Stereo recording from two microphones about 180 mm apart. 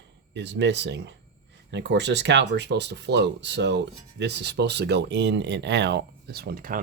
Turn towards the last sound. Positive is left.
turn(degrees=-55)  # may be behind; listen again after turning